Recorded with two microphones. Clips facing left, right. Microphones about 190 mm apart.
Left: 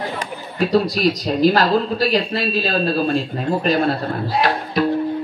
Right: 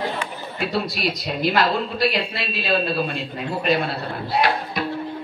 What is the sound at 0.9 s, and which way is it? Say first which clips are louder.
Speech: left 7 dB; 40° left (ahead or behind).